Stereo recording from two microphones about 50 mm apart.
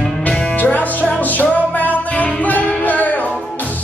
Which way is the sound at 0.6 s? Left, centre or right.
Left.